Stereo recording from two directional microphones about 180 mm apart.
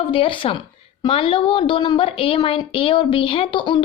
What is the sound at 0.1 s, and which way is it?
A woman's voice, 30° left (ahead or behind).